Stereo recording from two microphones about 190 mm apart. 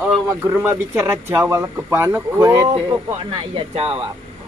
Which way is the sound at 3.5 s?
30° right (ahead or behind).